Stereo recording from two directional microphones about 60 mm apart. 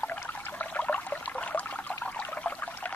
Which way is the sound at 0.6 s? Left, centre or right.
Left.